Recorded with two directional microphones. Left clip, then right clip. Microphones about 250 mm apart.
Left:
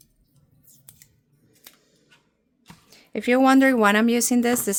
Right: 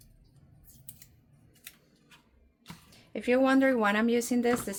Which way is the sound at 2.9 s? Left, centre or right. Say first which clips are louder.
Left 6 dB; left.